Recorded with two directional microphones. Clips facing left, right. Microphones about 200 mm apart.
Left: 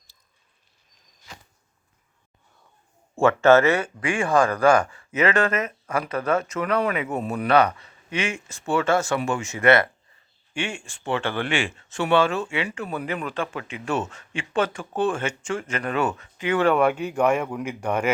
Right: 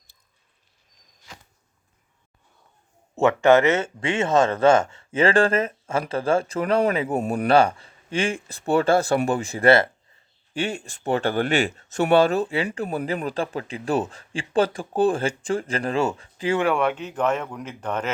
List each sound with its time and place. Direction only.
3.2 s speech: 15° right (ahead or behind)
16.7 s speech: 5° left (ahead or behind)